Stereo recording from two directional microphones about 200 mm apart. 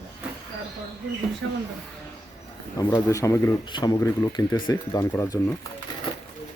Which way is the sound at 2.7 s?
20° left (ahead or behind).